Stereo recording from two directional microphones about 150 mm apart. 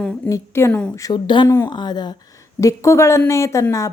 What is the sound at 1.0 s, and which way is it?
Speech, 25° left (ahead or behind).